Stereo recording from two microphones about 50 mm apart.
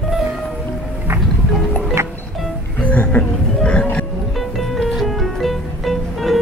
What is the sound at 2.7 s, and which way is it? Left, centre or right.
Music, left.